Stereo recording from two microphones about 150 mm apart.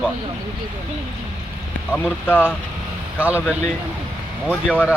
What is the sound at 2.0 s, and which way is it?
Speech, 15° left (ahead or behind).